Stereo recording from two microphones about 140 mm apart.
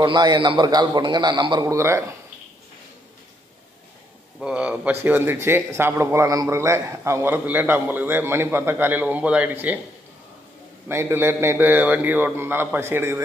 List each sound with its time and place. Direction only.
0.0 s a man's voice: 30° right (ahead or behind)
4.4 s a man's voice: 10° right (ahead or behind)
10.9 s a man's voice: 15° right (ahead or behind)